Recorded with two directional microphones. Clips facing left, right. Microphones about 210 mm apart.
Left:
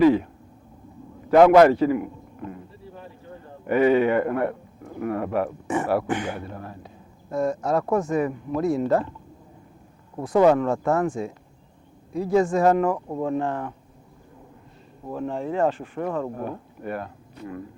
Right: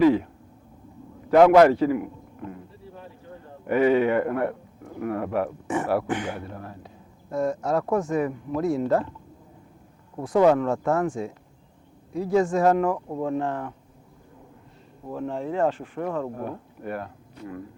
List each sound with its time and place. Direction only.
1.3 s speech: 15° left (ahead or behind)
3.7 s speech: 15° left (ahead or behind)
10.3 s speech: 15° left (ahead or behind)
12.3 s speech: 15° left (ahead or behind)
15.1 s speech: 25° left (ahead or behind)